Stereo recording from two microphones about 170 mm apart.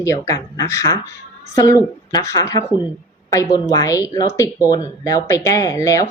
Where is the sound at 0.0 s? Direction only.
20° left (ahead or behind).